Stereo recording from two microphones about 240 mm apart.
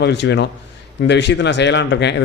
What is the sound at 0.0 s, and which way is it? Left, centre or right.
Speech, left.